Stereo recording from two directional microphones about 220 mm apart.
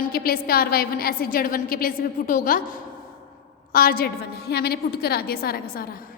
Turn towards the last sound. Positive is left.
turn(degrees=45)  # may be behind; listen again after turning